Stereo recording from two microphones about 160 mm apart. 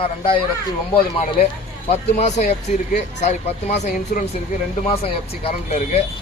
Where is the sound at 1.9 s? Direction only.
45° left (ahead or behind).